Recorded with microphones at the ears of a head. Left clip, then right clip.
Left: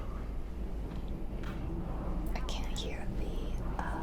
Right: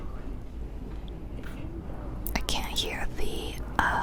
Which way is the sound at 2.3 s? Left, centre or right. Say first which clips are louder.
Right 15 dB; right.